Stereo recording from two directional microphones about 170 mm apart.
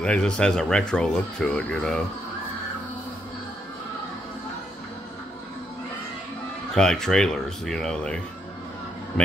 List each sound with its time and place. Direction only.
0.0 s speech: 5° left (ahead or behind)
6.7 s speech: 5° left (ahead or behind)